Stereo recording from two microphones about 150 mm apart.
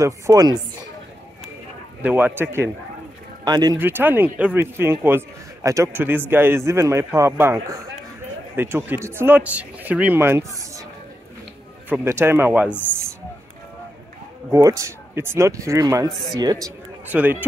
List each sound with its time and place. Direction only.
0.0 s speech: 25° right (ahead or behind)
2.0 s a man's voice: 10° right (ahead or behind)
3.4 s speech: 25° right (ahead or behind)
3.7 s a man's voice: 15° right (ahead or behind)
11.9 s a man's voice: 15° right (ahead or behind)
14.5 s speech: 20° right (ahead or behind)
17.1 s a man's voice: 10° right (ahead or behind)